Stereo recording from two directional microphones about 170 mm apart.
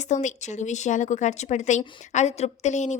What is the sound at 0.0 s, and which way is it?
Speech, 45° left (ahead or behind).